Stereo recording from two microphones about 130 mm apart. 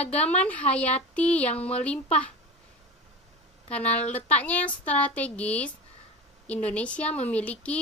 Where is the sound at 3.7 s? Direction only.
10° left (ahead or behind).